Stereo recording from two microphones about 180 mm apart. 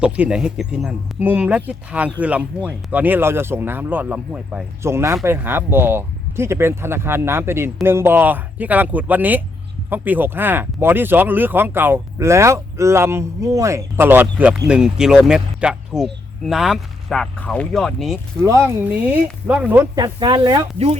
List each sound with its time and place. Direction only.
0.0 s speech: 5° right (ahead or behind)
18.4 s speech: 15° right (ahead or behind)
20.0 s speech: 25° right (ahead or behind)